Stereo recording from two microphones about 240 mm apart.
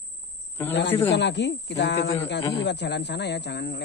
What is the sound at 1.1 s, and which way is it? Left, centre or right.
Speech, left.